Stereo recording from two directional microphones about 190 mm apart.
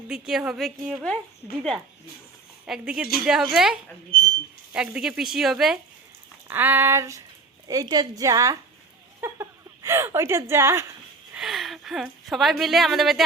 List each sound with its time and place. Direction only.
0.1 s speech: centre (ahead or behind)
2.6 s a woman's voice: 5° right (ahead or behind)
11.3 s a woman's voice: centre (ahead or behind)